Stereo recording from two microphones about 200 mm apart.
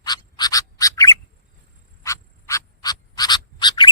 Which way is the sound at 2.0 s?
15° left (ahead or behind).